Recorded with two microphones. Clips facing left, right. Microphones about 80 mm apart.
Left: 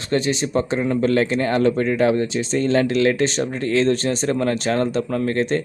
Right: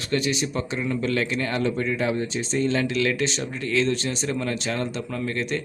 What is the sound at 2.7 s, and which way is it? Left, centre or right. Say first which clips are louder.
Speech: left 9 dB; left.